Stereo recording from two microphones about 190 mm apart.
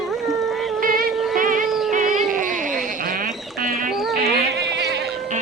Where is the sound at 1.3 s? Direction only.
45° right (ahead or behind).